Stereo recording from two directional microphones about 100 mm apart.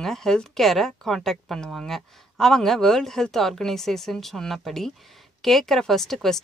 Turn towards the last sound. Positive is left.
turn(degrees=5)  # may be behind; listen again after turning